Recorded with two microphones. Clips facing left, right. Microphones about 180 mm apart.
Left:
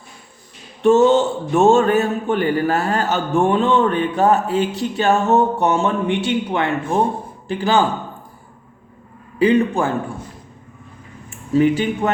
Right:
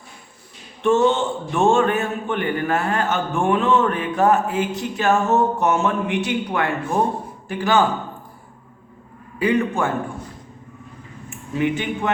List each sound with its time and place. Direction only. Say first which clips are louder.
0.8 s a man's voice: left 5 dB; 40° left (ahead or behind)
9.4 s a man's voice: left 4 dB; 30° left (ahead or behind)
11.3 s speech: left 7 dB; 35° left (ahead or behind)